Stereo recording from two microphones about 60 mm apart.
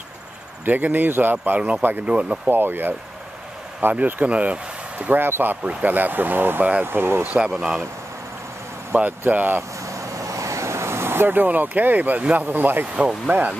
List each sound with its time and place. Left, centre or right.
0.7 s speech: right
2.5 s speech: right
3.9 s speech: right
5.2 s speech: right
5.6 s speech: right
7.2 s speech: centre
9.2 s speech: right
9.6 s vehicle: right
12.9 s speech: right